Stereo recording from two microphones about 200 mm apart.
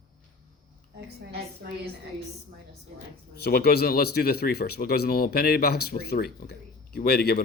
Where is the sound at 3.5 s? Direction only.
50° left (ahead or behind).